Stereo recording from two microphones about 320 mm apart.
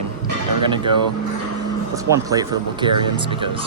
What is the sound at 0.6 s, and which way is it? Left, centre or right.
Speech, centre.